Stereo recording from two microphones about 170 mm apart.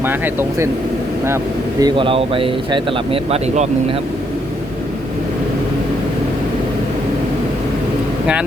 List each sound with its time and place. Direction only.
0.0 s speech: 15° right (ahead or behind)
1.8 s speech: 30° right (ahead or behind)